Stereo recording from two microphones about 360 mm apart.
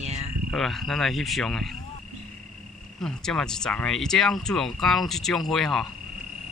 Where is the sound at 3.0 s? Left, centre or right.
Centre.